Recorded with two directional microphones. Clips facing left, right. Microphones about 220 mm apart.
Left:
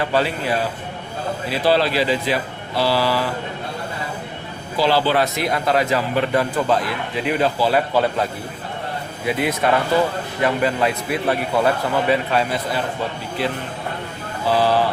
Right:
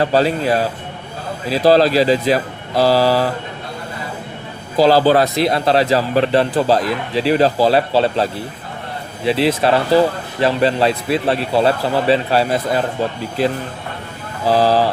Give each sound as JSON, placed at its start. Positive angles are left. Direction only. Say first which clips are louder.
{"t": 0.0, "sound": "speech", "louder": "right 5 dB", "side_deg": -40}
{"t": 4.8, "sound": "speech", "louder": "right 6 dB", "side_deg": -40}
{"t": 14.4, "sound": "speech", "louder": "right 4 dB", "side_deg": -40}